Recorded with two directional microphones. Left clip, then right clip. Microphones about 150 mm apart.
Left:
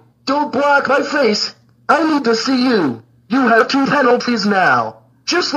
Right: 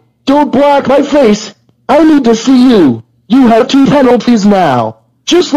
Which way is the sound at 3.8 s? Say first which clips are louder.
Right 6 dB; 40° right (ahead or behind).